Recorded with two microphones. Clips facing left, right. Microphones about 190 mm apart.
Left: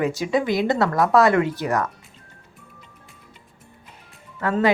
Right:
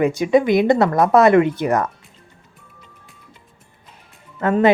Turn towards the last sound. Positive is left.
turn(degrees=-20)  # may be behind; listen again after turning